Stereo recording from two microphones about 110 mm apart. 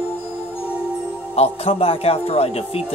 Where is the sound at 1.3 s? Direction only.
65° left (ahead or behind).